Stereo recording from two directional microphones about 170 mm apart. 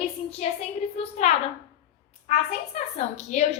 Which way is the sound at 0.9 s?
40° left (ahead or behind).